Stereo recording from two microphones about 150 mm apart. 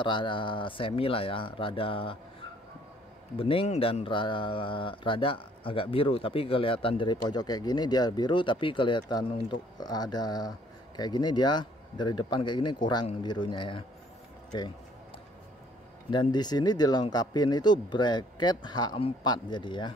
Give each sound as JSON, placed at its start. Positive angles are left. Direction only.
{"t": 0.0, "sound": "speech", "side_deg": 30}
{"t": 3.3, "sound": "speech", "side_deg": 35}
{"t": 16.1, "sound": "speech", "side_deg": 30}